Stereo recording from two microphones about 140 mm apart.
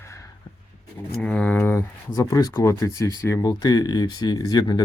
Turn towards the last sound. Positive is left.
turn(degrees=30)  # may be behind; listen again after turning